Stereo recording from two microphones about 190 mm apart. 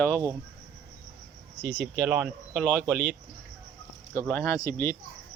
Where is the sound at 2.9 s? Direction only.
55° right (ahead or behind).